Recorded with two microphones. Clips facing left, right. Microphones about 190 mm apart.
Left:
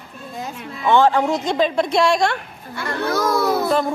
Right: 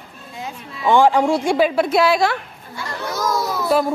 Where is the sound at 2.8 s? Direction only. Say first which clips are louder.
Left 4 dB; 60° left (ahead or behind).